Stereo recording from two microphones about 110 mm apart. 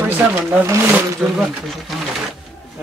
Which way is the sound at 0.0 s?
15° right (ahead or behind).